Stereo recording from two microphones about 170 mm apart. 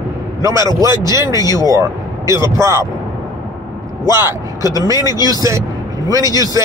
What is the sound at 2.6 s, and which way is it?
Speech, 20° right (ahead or behind).